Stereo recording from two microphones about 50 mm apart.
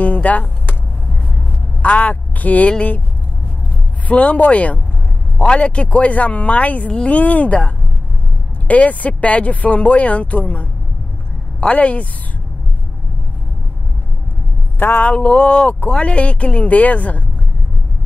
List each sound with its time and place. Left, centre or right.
0.0 s music: left
1.8 s a woman's voice: left
4.1 s speech: left
14.8 s a sound: left
15.1 s speech: left